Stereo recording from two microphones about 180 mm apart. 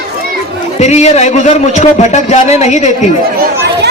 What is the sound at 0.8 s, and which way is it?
A man's voice, 40° left (ahead or behind).